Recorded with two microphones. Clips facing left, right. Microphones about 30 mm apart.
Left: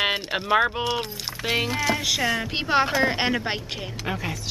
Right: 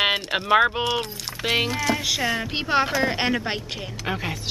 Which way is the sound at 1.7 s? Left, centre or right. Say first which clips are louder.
Even; centre.